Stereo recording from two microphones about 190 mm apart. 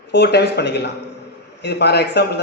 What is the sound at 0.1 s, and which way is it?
Speech, 60° left (ahead or behind).